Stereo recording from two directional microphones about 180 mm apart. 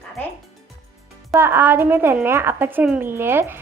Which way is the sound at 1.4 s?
10° right (ahead or behind).